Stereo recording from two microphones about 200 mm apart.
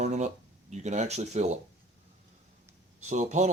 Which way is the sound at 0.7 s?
35° right (ahead or behind).